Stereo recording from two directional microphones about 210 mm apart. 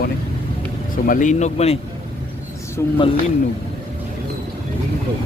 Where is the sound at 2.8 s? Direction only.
10° left (ahead or behind).